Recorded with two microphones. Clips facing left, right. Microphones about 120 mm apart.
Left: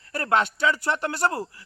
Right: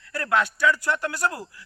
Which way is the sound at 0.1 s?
25° left (ahead or behind).